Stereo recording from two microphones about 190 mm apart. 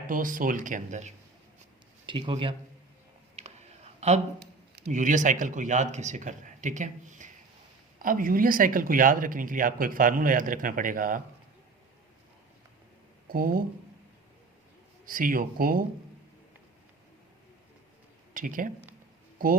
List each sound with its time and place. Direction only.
0.1 s speech: 45° right (ahead or behind)
2.0 s speech: 25° right (ahead or behind)
3.3 s a sound: 35° right (ahead or behind)
4.4 s a sound: 60° right (ahead or behind)
4.9 s speech: 45° right (ahead or behind)
13.2 s speech: 50° right (ahead or behind)
15.0 s speech: 45° right (ahead or behind)
18.3 s speech: 45° right (ahead or behind)